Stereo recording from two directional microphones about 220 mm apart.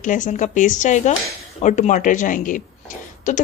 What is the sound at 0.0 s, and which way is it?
Speech, 35° left (ahead or behind).